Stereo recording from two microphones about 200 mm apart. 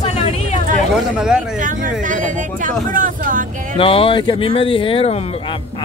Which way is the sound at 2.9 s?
40° right (ahead or behind).